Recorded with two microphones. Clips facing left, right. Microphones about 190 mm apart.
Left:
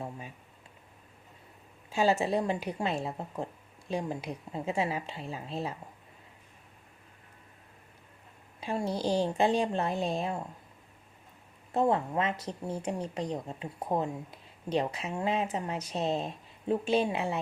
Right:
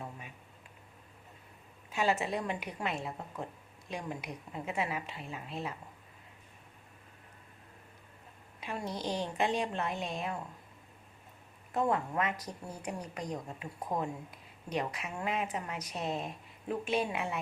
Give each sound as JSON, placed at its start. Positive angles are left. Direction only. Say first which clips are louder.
{"t": 1.9, "sound": "speech", "louder": "left 5 dB", "side_deg": 30}
{"t": 8.6, "sound": "speech", "louder": "left 6 dB", "side_deg": 30}
{"t": 11.7, "sound": "speech", "louder": "left 4 dB", "side_deg": 30}